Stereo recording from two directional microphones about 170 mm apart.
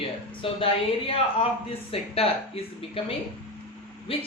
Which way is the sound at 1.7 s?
35° left (ahead or behind).